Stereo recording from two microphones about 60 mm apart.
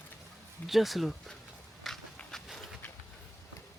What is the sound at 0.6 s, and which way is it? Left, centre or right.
Speech, centre.